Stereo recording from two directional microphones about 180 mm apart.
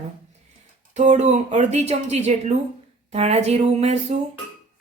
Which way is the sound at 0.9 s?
40° right (ahead or behind).